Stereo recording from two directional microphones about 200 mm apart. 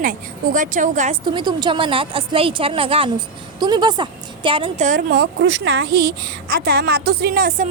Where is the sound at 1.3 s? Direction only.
20° right (ahead or behind).